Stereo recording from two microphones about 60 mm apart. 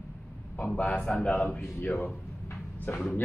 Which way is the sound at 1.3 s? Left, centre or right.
Left.